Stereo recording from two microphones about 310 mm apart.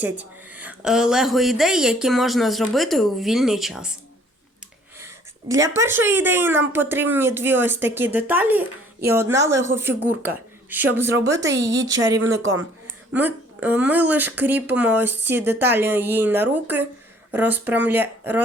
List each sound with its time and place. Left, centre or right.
0.0 s speech: centre
4.9 s speech: centre
11.2 s a woman's voice: right
13.1 s speech: centre